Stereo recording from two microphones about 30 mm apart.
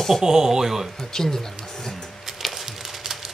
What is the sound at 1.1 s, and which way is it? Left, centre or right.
Speech, centre.